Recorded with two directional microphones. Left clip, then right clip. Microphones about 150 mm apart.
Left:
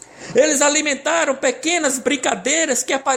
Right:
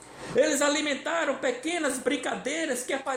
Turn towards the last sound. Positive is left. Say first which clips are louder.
# left 10 dB
turn(degrees=40)  # may be behind; listen again after turning